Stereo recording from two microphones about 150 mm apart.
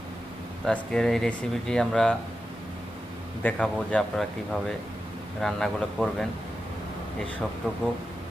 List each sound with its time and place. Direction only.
0.7 s speech: 5° left (ahead or behind)
3.4 s speech: 5° left (ahead or behind)
5.4 s speech: centre (ahead or behind)